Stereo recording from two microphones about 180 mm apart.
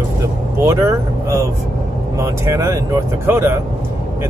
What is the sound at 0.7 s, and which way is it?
Speech, 15° right (ahead or behind).